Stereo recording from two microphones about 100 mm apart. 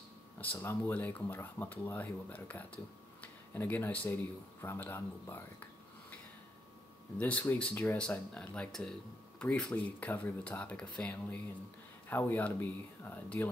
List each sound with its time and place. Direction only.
0.4 s speech: 20° left (ahead or behind)
7.2 s speech: 15° left (ahead or behind)